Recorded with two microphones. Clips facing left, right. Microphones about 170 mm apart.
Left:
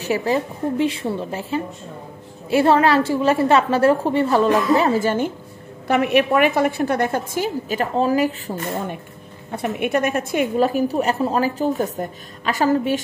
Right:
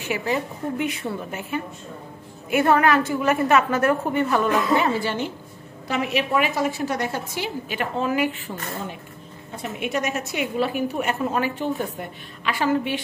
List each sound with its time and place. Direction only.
0.0 s a woman's voice: 35° left (ahead or behind)
5.9 s a woman's voice: 60° left (ahead or behind); by 8.8 s 40° left (ahead or behind)
9.5 s a woman's voice: 60° left (ahead or behind); by 13.0 s 40° left (ahead or behind)